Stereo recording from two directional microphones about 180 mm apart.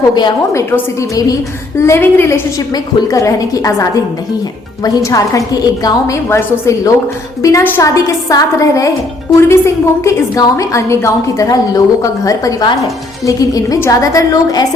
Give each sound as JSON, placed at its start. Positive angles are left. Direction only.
{"t": 0.1, "sound": "a woman's voice", "side_deg": 25}
{"t": 1.8, "sound": "a woman's voice", "side_deg": 15}